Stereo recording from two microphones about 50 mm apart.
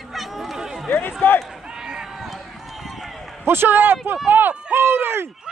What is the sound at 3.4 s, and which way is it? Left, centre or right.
A man's voice, right.